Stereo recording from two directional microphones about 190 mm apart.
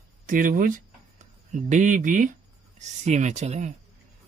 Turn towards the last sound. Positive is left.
turn(degrees=-40)  # may be behind; listen again after turning